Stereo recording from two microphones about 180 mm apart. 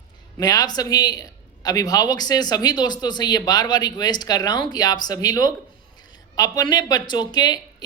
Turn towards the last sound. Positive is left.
turn(degrees=20)  # may be behind; listen again after turning